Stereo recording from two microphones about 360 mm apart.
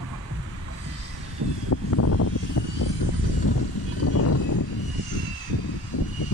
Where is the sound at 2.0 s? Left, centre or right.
Left.